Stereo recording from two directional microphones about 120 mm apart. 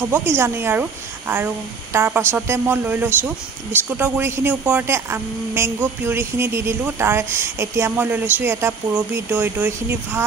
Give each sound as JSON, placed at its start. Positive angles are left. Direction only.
{"t": 0.1, "sound": "a woman's voice", "side_deg": -20}